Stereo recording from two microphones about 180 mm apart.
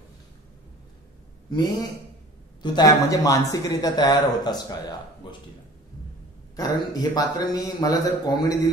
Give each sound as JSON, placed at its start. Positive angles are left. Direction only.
{"t": 1.5, "sound": "speech", "side_deg": 25}
{"t": 6.5, "sound": "speech", "side_deg": 20}